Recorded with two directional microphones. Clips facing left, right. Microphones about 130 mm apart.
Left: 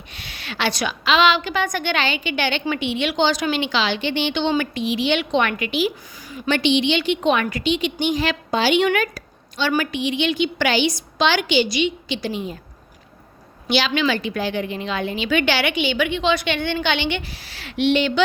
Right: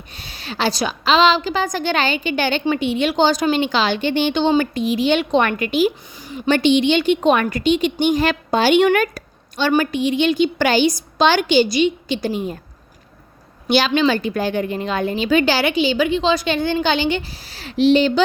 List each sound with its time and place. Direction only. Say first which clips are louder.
0.1 s a woman's voice: right 3 dB; 35° right (ahead or behind)
6.1 s speech: right 4 dB; 25° right (ahead or behind)
6.5 s a woman's voice: right 4 dB; 45° right (ahead or behind)
13.7 s a woman's voice: right 4 dB; 45° right (ahead or behind)